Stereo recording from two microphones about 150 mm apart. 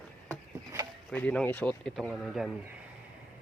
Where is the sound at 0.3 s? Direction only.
20° right (ahead or behind).